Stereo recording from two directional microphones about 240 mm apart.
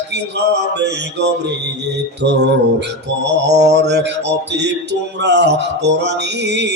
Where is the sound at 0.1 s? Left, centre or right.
Right.